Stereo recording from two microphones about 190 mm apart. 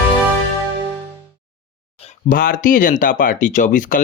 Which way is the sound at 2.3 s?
50° left (ahead or behind).